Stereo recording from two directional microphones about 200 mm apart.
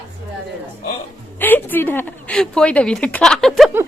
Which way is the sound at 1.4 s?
10° left (ahead or behind).